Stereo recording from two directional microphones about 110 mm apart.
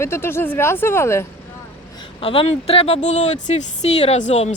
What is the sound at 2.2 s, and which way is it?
Speech, 60° left (ahead or behind).